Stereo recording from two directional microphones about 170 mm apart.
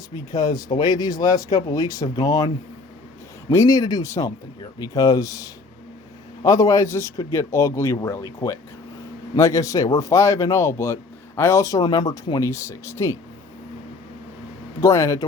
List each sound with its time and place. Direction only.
0.3 s speech: 20° left (ahead or behind)
3.5 s a man's voice: 20° left (ahead or behind)
14.8 s speech: 20° left (ahead or behind)